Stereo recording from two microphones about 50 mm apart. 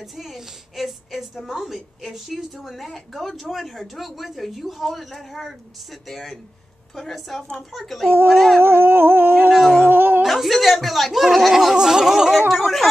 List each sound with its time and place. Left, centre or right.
0.0 s a woman's voice: centre
8.5 s humming: right
9.8 s a sound: right
10.2 s a woman's voice: centre
11.7 s speech: centre